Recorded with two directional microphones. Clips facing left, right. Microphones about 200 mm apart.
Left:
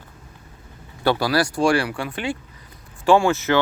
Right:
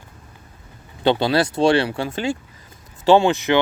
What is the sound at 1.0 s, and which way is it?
Speech, 25° right (ahead or behind).